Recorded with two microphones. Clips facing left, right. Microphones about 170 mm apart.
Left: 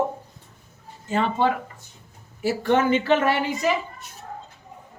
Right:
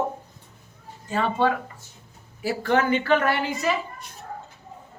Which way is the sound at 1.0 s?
25° left (ahead or behind).